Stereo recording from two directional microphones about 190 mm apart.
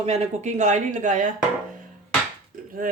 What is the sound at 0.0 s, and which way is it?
A man's voice, 35° right (ahead or behind).